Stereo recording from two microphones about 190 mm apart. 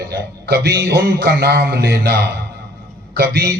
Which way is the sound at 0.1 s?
60° right (ahead or behind).